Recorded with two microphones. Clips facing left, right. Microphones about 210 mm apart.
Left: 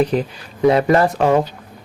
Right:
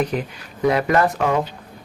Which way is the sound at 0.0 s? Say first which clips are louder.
Left 5 dB; 30° left (ahead or behind).